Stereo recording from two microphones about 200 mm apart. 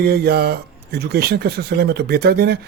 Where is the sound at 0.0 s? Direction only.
50° right (ahead or behind).